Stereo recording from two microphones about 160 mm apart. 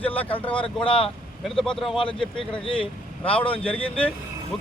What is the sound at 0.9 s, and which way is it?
Speech, 35° left (ahead or behind).